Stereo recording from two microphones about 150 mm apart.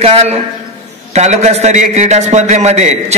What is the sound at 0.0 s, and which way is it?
A man's voice, 40° right (ahead or behind).